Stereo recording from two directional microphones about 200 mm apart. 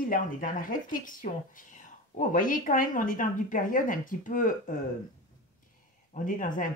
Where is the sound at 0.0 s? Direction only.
40° left (ahead or behind).